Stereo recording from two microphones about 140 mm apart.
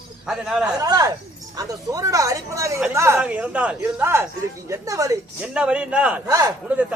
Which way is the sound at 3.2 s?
10° right (ahead or behind).